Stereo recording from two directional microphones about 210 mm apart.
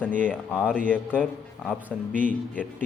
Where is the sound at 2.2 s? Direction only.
10° left (ahead or behind).